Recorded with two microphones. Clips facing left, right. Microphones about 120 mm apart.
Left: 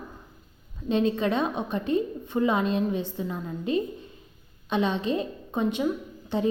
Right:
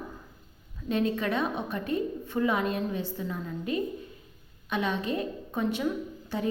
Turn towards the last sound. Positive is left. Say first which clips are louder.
# left 4 dB
turn(degrees=20)  # may be behind; listen again after turning